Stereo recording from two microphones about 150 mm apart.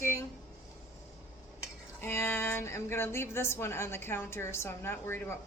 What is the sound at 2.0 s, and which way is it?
A woman's voice, 15° left (ahead or behind).